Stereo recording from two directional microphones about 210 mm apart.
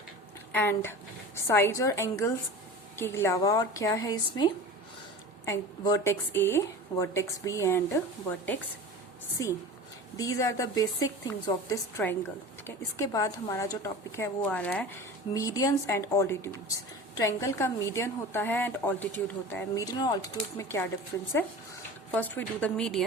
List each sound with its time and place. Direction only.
0.5 s speech: 10° left (ahead or behind)
10.2 s speech: 15° left (ahead or behind)
22.1 s a woman's voice: 5° left (ahead or behind)